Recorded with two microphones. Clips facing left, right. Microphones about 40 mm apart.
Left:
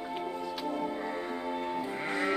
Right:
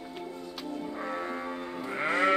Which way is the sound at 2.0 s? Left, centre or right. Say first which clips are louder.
Right 7 dB; right.